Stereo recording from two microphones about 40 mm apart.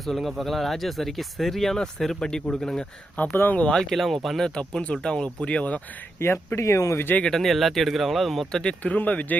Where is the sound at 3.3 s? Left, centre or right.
Left.